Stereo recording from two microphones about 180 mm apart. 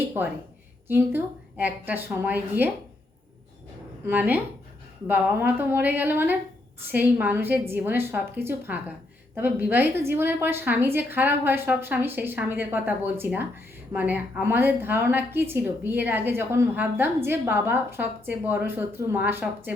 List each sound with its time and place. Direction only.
0.2 s a woman's voice: 10° right (ahead or behind)
4.0 s a woman's voice: 10° right (ahead or behind)